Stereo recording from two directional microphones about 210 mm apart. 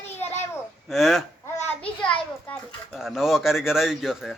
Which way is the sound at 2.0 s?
5° left (ahead or behind).